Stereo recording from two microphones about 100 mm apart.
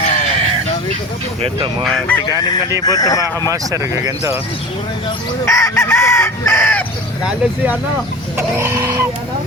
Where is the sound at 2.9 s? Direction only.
35° left (ahead or behind).